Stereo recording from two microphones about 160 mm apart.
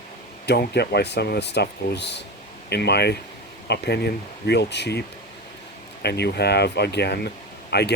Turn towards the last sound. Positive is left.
turn(degrees=90)